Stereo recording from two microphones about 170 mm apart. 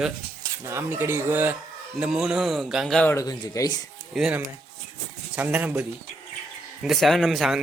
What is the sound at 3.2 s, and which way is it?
Speech, 20° left (ahead or behind).